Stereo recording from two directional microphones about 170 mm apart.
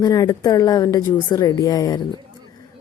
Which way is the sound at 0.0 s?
20° left (ahead or behind).